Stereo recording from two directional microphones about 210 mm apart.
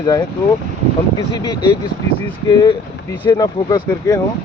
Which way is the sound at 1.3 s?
20° left (ahead or behind).